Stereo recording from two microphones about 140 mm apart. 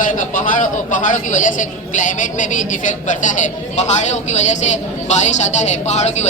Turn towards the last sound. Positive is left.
turn(degrees=55)  # may be behind; listen again after turning